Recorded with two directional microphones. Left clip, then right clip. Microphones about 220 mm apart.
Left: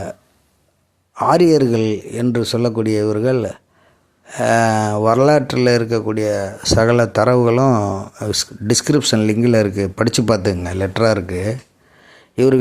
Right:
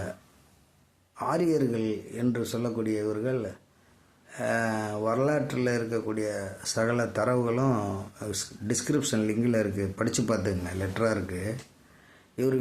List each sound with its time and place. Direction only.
1.1 s speech: 40° left (ahead or behind)